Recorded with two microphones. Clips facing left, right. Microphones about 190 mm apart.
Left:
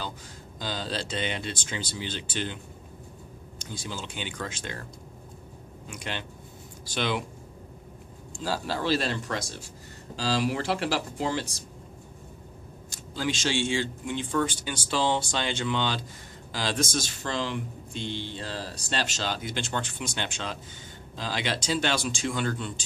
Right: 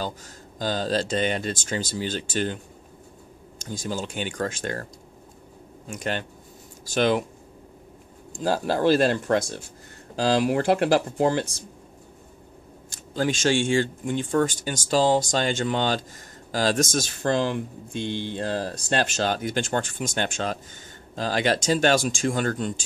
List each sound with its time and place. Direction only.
0.6 s speech: 45° right (ahead or behind)
5.9 s speech: 45° right (ahead or behind)
8.4 s speech: 50° right (ahead or behind)
12.9 s speech: 50° right (ahead or behind)